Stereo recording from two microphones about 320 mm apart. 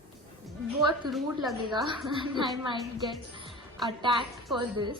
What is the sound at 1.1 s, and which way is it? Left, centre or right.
Speech, centre.